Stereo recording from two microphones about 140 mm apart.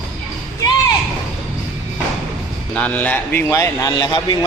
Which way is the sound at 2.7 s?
10° left (ahead or behind).